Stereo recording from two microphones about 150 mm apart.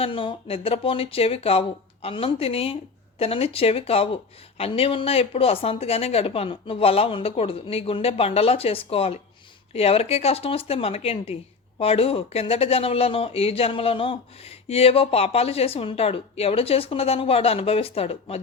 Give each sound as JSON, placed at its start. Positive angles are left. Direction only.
{"t": 0.0, "sound": "speech", "side_deg": 35}